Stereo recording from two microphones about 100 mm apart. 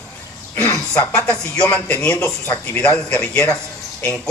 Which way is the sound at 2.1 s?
25° left (ahead or behind).